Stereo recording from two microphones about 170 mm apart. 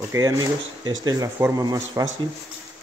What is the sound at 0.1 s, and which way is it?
Speech, 20° right (ahead or behind).